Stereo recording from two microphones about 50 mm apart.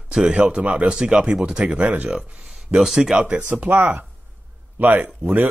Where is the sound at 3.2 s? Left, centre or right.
Right.